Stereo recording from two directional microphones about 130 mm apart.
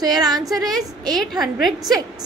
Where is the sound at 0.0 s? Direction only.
30° right (ahead or behind).